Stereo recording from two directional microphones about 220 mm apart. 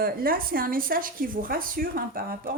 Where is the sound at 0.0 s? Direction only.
40° right (ahead or behind).